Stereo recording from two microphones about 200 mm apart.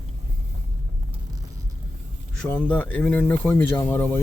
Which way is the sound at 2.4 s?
5° left (ahead or behind).